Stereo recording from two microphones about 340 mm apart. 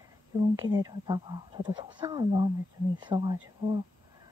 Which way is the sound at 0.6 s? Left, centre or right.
Centre.